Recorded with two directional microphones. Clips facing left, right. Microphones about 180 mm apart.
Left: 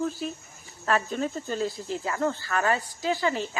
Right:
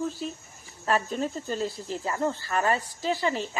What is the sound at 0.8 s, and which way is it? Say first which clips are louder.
Speech: even; centre (ahead or behind).